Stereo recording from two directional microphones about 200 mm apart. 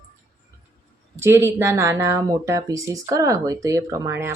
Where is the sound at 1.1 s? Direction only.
10° right (ahead or behind).